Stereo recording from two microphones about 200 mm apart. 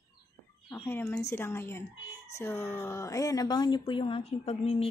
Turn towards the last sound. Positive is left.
turn(degrees=30)  # may be behind; listen again after turning